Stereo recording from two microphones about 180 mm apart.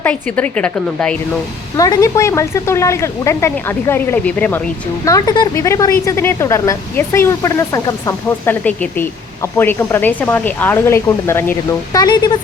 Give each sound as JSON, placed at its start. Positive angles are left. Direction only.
{"t": 0.0, "sound": "speech", "side_deg": 10}
{"t": 1.7, "sound": "speech", "side_deg": 20}
{"t": 5.0, "sound": "speech", "side_deg": 20}